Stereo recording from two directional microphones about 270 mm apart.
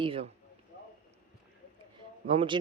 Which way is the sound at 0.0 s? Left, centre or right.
Centre.